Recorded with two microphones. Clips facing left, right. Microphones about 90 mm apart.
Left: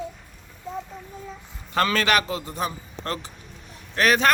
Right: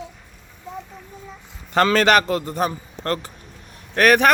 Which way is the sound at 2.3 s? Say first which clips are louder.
Right 6 dB; 60° right (ahead or behind).